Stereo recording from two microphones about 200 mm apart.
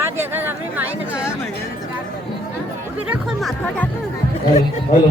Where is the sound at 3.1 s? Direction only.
Centre (ahead or behind).